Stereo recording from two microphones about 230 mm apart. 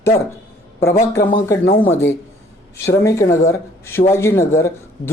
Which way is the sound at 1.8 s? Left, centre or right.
Centre.